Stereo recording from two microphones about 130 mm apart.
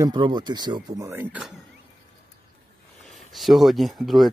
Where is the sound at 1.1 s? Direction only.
15° right (ahead or behind).